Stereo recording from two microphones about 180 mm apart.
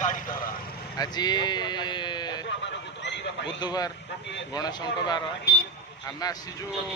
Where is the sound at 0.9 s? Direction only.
20° left (ahead or behind).